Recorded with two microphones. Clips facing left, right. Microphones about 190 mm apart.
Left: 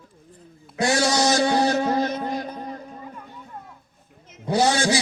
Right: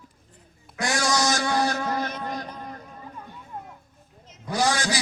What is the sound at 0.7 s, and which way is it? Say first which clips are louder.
A man's voice: left 4 dB; 25° left (ahead or behind).